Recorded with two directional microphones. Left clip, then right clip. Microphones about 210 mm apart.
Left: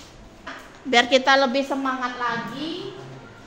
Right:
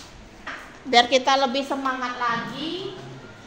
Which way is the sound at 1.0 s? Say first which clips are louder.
Left 1 dB; 20° left (ahead or behind).